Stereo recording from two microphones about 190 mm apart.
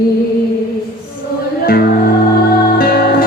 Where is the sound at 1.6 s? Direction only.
50° left (ahead or behind).